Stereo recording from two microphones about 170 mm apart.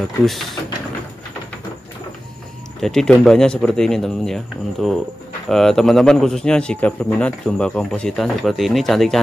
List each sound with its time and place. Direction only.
0.2 s speech: centre (ahead or behind)
2.8 s speech: 5° left (ahead or behind)